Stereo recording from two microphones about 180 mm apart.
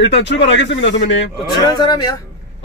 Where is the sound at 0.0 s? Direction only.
80° left.